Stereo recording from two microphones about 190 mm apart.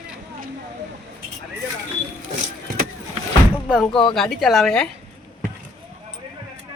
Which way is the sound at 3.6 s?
Centre (ahead or behind).